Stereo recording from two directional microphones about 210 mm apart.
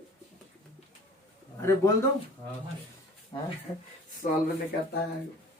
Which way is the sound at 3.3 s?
25° left (ahead or behind).